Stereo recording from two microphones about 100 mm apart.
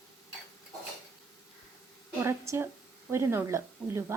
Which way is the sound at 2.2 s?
25° right (ahead or behind).